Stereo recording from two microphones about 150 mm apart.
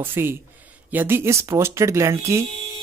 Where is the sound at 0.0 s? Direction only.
15° right (ahead or behind).